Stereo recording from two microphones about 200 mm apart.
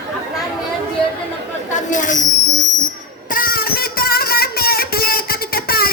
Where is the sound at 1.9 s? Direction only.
40° left (ahead or behind).